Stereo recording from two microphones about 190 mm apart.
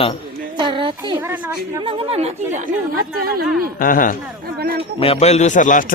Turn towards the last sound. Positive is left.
turn(degrees=40)  # may be behind; listen again after turning